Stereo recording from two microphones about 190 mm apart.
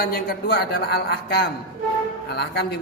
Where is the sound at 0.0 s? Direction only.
55° left (ahead or behind).